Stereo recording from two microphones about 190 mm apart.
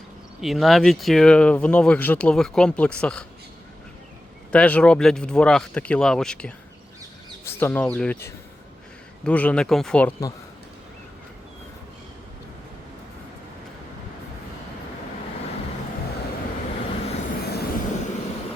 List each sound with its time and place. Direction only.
0.4 s speech: centre (ahead or behind)
4.5 s speech: 5° left (ahead or behind)
17.5 s vehicle: 55° left (ahead or behind)